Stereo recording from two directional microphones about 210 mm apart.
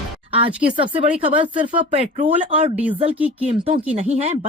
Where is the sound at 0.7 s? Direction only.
25° right (ahead or behind).